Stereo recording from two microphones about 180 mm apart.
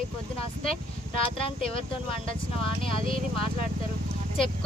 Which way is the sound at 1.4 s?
30° left (ahead or behind).